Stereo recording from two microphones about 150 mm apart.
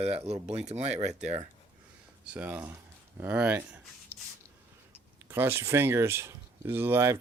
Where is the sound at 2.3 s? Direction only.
10° right (ahead or behind).